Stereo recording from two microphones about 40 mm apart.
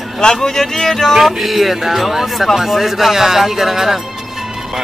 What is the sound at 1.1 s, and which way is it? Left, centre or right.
Speech, centre.